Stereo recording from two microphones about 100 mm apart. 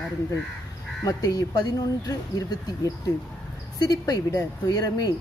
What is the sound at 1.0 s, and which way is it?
Speech, 40° left (ahead or behind).